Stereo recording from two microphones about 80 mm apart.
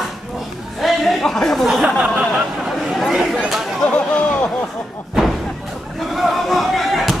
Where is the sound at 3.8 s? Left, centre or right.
Centre.